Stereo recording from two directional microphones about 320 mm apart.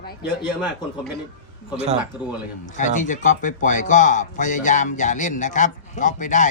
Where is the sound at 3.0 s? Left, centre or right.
Left.